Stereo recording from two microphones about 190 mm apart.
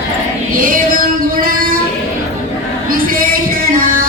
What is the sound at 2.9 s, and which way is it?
Music, 50° right (ahead or behind).